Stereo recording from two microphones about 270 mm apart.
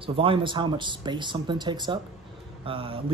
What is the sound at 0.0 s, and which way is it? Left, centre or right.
Speech, centre.